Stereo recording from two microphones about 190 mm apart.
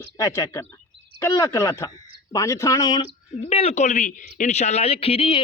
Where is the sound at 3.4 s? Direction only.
30° left (ahead or behind).